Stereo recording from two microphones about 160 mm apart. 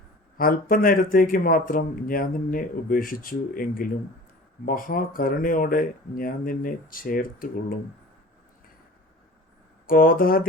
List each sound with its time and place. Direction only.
0.3 s speech: 60° left (ahead or behind)
9.8 s speech: 65° left (ahead or behind)